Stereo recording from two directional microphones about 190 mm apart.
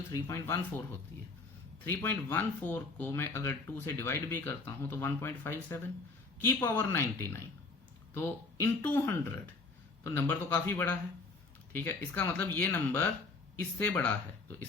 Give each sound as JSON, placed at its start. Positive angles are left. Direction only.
{"t": 0.1, "sound": "speech", "side_deg": 15}
{"t": 1.8, "sound": "speech", "side_deg": 10}